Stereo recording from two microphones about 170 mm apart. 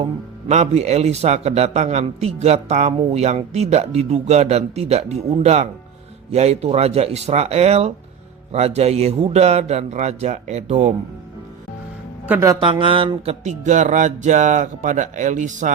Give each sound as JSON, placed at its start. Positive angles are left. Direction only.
{"t": 0.0, "sound": "speech", "side_deg": -40}
{"t": 12.3, "sound": "speech", "side_deg": -15}
{"t": 12.5, "sound": "speech", "side_deg": -30}
{"t": 13.4, "sound": "speech", "side_deg": -45}